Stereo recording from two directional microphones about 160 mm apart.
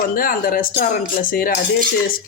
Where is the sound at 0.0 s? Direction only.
60° left (ahead or behind).